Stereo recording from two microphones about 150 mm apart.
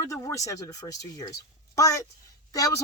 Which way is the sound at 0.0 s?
20° left (ahead or behind).